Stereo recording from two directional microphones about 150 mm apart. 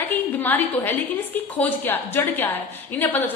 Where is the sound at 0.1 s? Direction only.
10° left (ahead or behind).